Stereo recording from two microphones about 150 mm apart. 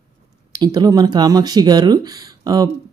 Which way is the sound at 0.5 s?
30° right (ahead or behind).